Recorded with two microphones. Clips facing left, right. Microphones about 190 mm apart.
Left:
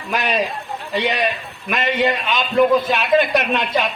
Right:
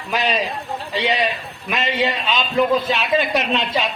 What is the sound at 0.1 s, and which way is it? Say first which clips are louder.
A man's voice: left 1 dB; 55° left (ahead or behind).